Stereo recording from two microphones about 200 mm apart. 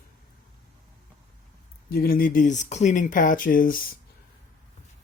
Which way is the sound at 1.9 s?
50° left (ahead or behind).